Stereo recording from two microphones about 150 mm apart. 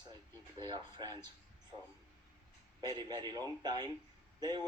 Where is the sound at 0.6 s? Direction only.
30° right (ahead or behind).